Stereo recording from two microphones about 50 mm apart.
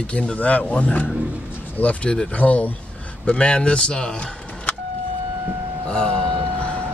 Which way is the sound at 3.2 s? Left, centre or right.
Centre.